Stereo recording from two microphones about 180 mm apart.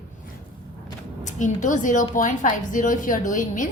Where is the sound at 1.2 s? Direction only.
45° left (ahead or behind).